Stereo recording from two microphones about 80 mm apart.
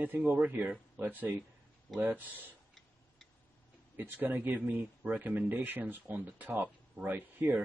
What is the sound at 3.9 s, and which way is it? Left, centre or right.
A man's voice, right.